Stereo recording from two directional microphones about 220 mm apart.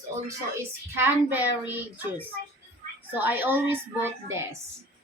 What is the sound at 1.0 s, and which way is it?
Speech, 10° right (ahead or behind).